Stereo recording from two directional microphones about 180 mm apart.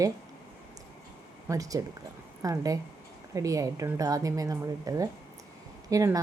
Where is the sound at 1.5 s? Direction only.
20° right (ahead or behind).